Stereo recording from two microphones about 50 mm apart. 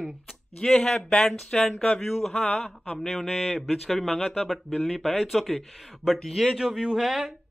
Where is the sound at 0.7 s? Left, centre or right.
Centre.